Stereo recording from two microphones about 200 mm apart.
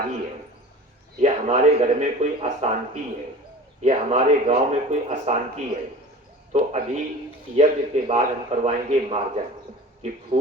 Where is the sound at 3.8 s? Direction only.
35° right (ahead or behind).